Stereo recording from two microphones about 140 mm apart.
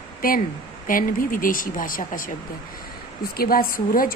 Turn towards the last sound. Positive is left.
turn(degrees=90)